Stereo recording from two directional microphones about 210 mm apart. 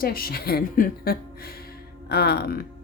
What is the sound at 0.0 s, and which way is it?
Speech, 45° left (ahead or behind).